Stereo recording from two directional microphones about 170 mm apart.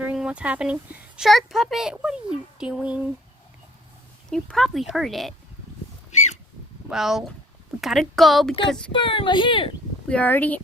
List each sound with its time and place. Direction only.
0.0 s speech: 5° right (ahead or behind)
4.3 s speech: centre (ahead or behind)
6.9 s speech: centre (ahead or behind)
8.9 s a child's voice: 30° left (ahead or behind)
10.1 s speech: 10° left (ahead or behind)